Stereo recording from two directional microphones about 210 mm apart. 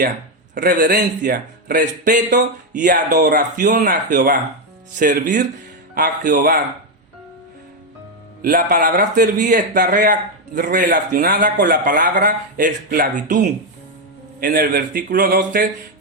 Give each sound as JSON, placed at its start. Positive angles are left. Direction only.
{"t": 0.5, "sound": "a man's voice", "side_deg": -40}
{"t": 8.4, "sound": "speech", "side_deg": -45}
{"t": 14.4, "sound": "a man's voice", "side_deg": -45}